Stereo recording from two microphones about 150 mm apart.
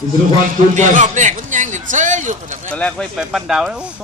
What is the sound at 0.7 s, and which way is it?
A man's voice, 55° right (ahead or behind).